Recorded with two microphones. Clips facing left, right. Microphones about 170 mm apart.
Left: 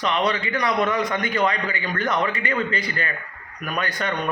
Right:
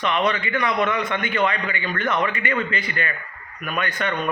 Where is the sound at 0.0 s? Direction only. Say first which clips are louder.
Even; 35° left (ahead or behind).